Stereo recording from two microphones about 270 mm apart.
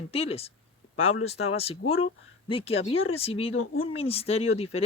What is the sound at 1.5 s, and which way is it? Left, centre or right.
Speech, left.